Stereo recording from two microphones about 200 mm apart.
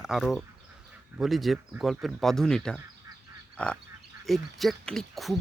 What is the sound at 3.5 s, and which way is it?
Honk, 5° left (ahead or behind).